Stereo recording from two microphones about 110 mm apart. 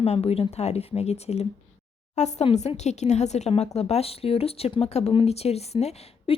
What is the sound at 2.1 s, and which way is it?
Speech, 90° left.